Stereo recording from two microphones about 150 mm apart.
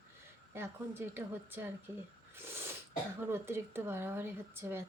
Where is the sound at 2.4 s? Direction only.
15° right (ahead or behind).